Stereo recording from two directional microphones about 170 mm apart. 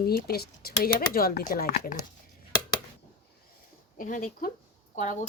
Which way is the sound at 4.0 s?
55° left (ahead or behind).